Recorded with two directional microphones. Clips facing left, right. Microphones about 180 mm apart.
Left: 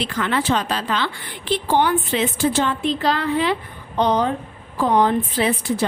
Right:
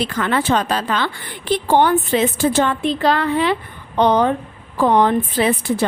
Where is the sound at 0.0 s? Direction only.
50° right (ahead or behind).